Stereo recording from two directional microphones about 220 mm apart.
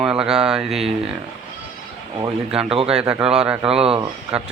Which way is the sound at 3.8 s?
25° right (ahead or behind).